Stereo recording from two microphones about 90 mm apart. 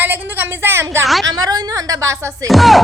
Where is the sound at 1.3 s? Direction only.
45° right (ahead or behind).